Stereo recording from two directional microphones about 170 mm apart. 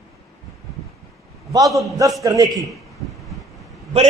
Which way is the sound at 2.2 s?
20° right (ahead or behind).